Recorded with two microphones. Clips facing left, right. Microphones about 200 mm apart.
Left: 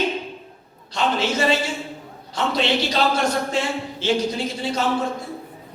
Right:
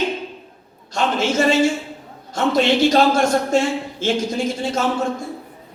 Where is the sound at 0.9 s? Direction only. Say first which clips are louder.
Right 2 dB; 45° right (ahead or behind).